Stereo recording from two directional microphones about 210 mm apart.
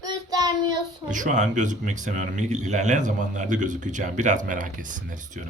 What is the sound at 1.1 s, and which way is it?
Speech, 35° right (ahead or behind).